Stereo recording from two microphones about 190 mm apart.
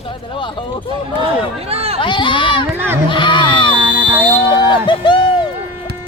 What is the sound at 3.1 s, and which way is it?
Speech, 25° left (ahead or behind).